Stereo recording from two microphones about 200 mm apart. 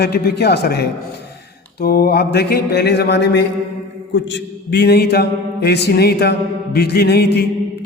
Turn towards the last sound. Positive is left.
turn(degrees=55)  # may be behind; listen again after turning